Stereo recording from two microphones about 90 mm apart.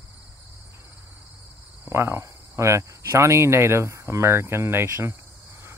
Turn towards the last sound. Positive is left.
turn(degrees=-25)  # may be behind; listen again after turning